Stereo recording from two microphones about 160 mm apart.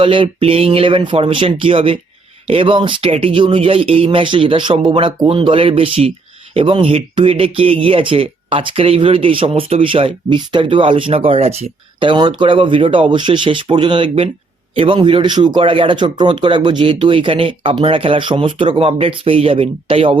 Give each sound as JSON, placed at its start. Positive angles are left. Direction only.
{"t": 0.0, "sound": "speech", "side_deg": -35}